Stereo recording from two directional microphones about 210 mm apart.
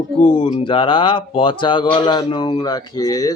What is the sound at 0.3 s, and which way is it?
Speech, 25° left (ahead or behind).